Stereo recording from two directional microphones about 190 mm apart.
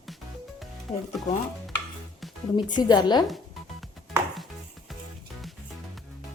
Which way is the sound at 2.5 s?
25° left (ahead or behind).